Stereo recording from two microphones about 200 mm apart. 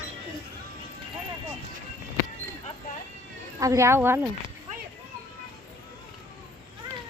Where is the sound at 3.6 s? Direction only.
15° right (ahead or behind).